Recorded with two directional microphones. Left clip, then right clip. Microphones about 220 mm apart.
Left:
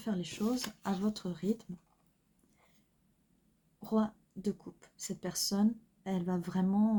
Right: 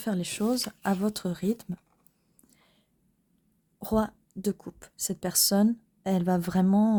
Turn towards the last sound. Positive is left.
turn(degrees=-50)  # may be behind; listen again after turning